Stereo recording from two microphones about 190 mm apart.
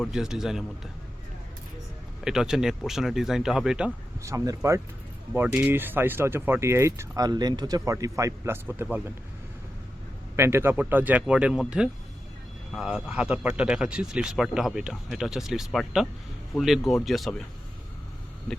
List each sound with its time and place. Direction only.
0.0 s speech: 5° right (ahead or behind)
2.2 s speech: 5° right (ahead or behind)
4.2 s speech: 15° right (ahead or behind)
10.3 s speech: 15° right (ahead or behind)